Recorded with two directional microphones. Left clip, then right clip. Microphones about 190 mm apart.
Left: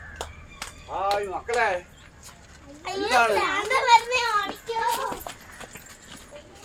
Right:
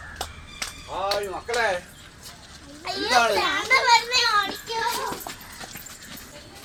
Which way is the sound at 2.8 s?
25° left (ahead or behind).